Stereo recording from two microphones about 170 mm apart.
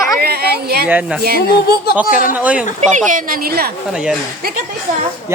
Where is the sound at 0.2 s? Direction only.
65° right (ahead or behind).